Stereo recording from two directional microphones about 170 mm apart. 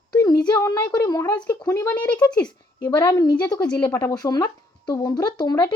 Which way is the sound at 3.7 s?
10° left (ahead or behind).